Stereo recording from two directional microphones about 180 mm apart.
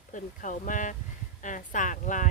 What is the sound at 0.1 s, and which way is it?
Speech, 45° left (ahead or behind).